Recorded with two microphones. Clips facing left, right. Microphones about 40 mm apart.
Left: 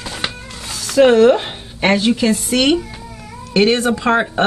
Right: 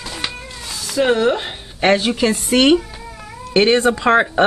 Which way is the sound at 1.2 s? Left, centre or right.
Centre.